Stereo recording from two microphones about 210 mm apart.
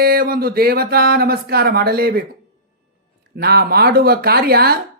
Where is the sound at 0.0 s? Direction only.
45° right (ahead or behind).